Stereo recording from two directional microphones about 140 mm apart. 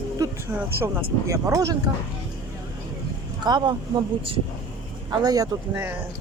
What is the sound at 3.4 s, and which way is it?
Speech, 30° right (ahead or behind).